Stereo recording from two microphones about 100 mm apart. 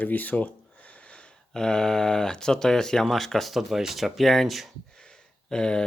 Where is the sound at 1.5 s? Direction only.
5° left (ahead or behind).